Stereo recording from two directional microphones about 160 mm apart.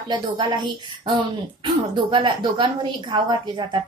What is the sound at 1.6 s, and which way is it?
A woman's voice, 30° right (ahead or behind).